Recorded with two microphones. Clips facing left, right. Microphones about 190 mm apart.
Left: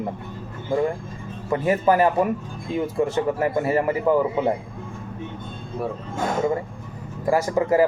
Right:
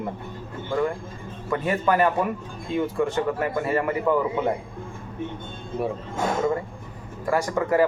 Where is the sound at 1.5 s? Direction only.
20° left (ahead or behind).